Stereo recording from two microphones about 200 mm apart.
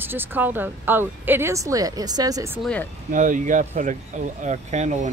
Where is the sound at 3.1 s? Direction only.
40° right (ahead or behind).